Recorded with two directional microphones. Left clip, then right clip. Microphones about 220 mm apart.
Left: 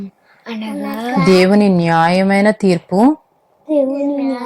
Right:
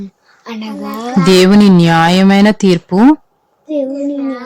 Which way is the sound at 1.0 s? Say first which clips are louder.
Right 2 dB; 15° right (ahead or behind).